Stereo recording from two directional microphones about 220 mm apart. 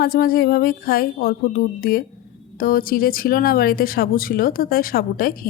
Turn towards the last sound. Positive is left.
turn(degrees=40)  # may be behind; listen again after turning